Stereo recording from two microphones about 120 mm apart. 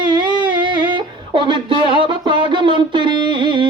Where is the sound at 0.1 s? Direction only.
40° right (ahead or behind).